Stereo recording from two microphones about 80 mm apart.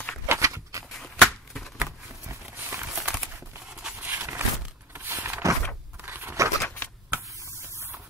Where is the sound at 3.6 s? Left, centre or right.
Centre.